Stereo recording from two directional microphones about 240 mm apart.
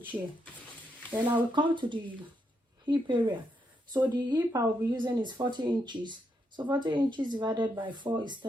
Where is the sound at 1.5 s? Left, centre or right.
Centre.